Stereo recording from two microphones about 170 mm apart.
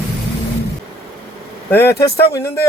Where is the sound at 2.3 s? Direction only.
15° left (ahead or behind).